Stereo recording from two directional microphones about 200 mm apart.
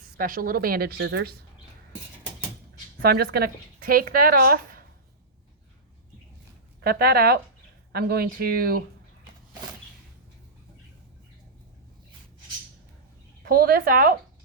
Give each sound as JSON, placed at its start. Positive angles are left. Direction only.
{"t": 0.0, "sound": "speech", "side_deg": -45}
{"t": 3.0, "sound": "speech", "side_deg": -50}
{"t": 6.8, "sound": "speech", "side_deg": -50}
{"t": 13.4, "sound": "speech", "side_deg": -50}